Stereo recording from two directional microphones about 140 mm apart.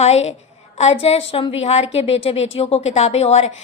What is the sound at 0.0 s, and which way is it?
A woman's voice, 50° left (ahead or behind).